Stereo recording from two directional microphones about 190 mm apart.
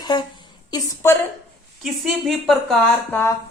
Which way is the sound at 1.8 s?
Centre (ahead or behind).